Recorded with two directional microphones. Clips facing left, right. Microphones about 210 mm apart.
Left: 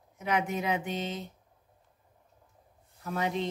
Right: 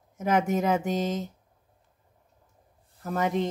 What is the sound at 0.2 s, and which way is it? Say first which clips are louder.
A woman's voice: right 6 dB; 45° right (ahead or behind).